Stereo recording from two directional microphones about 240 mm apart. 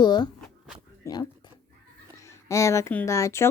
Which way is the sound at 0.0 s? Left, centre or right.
Centre.